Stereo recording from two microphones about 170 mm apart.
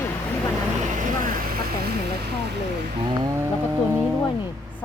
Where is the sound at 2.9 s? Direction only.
25° right (ahead or behind).